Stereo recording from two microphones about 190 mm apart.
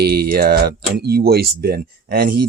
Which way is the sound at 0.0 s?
55° right (ahead or behind).